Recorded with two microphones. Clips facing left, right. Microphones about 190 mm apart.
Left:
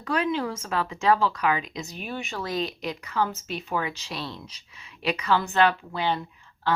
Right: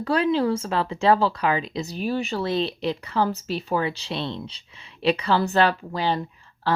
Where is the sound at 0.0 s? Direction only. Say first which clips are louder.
Right 5 dB; 30° right (ahead or behind).